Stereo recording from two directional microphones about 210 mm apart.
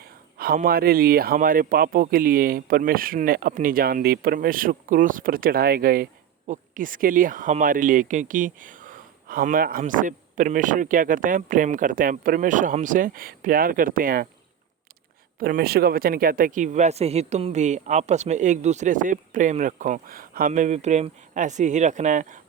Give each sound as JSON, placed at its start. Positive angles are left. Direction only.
{"t": 0.0, "sound": "speech", "side_deg": -45}
{"t": 15.4, "sound": "speech", "side_deg": -45}